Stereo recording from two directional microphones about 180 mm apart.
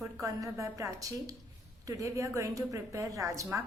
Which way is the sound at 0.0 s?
15° right (ahead or behind).